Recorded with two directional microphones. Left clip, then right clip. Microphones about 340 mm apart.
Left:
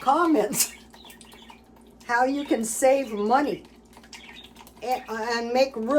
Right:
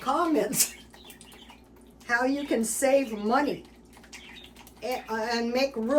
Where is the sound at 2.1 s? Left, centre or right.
Centre.